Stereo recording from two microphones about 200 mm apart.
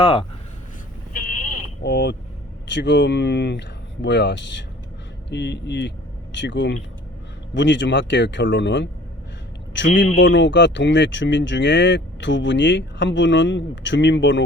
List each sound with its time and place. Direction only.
0.0 s speech: 25° left (ahead or behind)
1.8 s speech: 55° left (ahead or behind)